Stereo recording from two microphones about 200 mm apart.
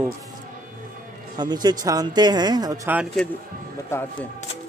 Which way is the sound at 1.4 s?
20° right (ahead or behind).